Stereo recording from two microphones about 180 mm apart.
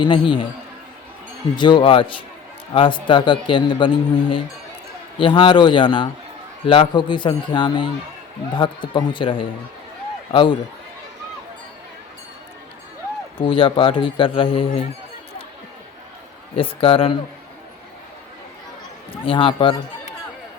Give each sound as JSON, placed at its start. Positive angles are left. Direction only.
{"t": 0.0, "sound": "a man's voice", "side_deg": 25}
{"t": 1.5, "sound": "a man's voice", "side_deg": 25}
{"t": 13.4, "sound": "a man's voice", "side_deg": 30}
{"t": 16.6, "sound": "a man's voice", "side_deg": 30}
{"t": 19.2, "sound": "speech", "side_deg": 30}